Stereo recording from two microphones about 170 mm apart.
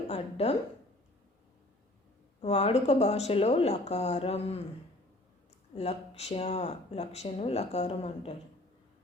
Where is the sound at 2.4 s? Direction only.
35° left (ahead or behind).